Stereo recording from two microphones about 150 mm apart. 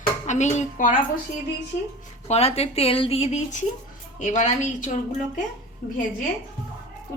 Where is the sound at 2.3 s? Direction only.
45° left (ahead or behind).